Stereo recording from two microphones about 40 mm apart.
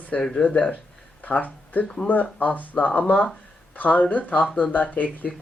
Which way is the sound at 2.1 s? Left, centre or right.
Left.